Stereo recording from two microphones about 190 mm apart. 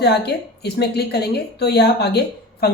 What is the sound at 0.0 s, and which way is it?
Speech, 60° left (ahead or behind).